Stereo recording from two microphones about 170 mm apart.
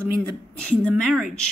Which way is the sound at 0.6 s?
5° left (ahead or behind).